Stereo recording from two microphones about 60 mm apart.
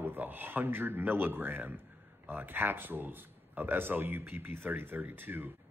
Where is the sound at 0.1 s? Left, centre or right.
Right.